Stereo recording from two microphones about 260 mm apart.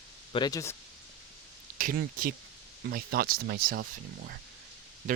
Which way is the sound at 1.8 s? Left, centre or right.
Right.